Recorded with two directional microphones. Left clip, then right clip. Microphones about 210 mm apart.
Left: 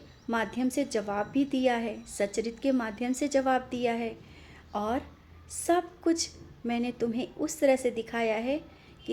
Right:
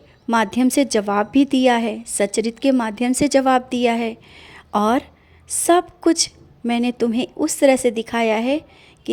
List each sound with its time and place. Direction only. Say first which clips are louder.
0.3 s a woman's voice: right 12 dB; 45° right (ahead or behind)